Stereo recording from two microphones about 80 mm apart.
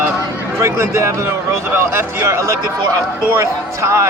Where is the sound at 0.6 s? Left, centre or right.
Right.